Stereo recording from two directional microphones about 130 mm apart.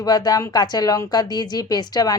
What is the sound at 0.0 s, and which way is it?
Speech, 30° left (ahead or behind).